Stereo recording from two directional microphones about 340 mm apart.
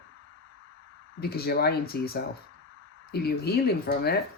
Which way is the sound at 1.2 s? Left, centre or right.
Left.